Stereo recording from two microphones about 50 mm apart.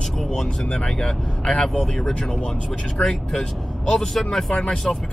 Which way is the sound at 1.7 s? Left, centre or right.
Centre.